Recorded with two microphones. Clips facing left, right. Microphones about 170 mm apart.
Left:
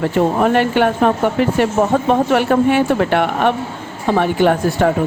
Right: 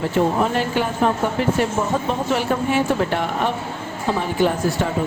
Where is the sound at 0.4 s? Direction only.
65° left (ahead or behind).